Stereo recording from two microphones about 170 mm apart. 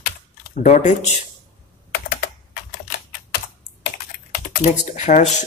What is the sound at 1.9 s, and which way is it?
Computer keyboard, 75° left (ahead or behind).